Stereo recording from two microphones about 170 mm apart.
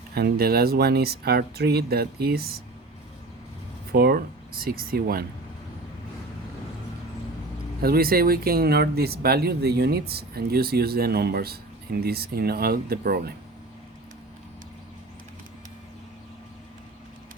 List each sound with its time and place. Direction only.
0.1 s speech: 65° right (ahead or behind)
3.9 s speech: 65° right (ahead or behind)
7.8 s speech: 60° right (ahead or behind)